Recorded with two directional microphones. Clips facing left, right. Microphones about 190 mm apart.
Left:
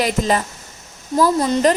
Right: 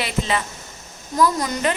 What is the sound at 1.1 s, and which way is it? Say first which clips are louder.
Speech: left 4 dB; 30° left (ahead or behind).